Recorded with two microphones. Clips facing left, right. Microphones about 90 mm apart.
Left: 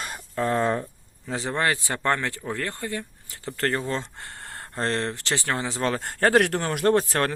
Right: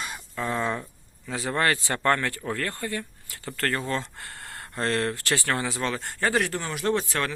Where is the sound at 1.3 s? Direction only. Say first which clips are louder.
Even; 25° left (ahead or behind).